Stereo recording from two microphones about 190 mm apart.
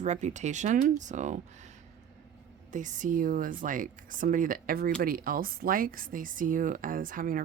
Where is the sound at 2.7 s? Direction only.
40° right (ahead or behind).